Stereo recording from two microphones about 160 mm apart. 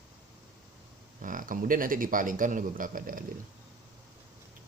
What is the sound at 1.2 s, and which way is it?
A man's voice, 55° right (ahead or behind).